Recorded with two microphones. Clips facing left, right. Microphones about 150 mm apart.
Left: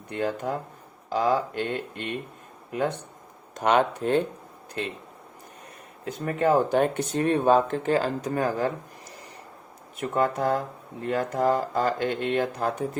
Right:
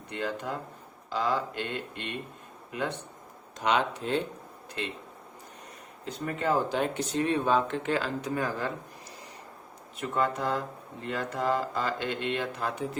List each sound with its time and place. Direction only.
0.1 s speech: 45° left (ahead or behind)
3.5 s speech: 50° left (ahead or behind)
6.1 s speech: 50° left (ahead or behind)
10.0 s speech: 45° left (ahead or behind)